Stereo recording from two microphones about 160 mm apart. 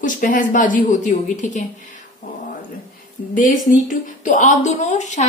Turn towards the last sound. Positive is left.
turn(degrees=45)  # may be behind; listen again after turning